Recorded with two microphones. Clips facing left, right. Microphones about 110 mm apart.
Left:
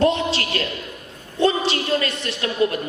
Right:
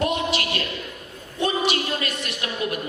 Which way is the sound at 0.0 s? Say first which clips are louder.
Left 4 dB; 30° left (ahead or behind).